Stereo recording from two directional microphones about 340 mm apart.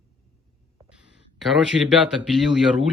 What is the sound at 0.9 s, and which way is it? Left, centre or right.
Speech, centre.